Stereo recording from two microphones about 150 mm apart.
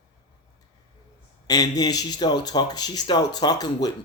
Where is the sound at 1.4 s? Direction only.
25° left (ahead or behind).